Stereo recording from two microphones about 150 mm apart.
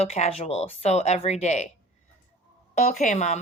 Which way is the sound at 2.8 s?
55° left (ahead or behind).